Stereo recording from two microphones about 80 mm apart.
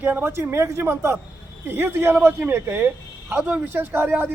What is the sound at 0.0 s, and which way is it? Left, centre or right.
A man's voice, right.